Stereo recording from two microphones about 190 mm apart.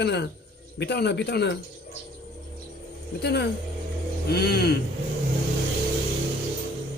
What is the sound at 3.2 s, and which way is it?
Speech, 60° left (ahead or behind).